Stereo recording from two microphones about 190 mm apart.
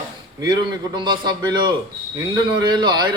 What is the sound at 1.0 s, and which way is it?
Speech, 25° right (ahead or behind).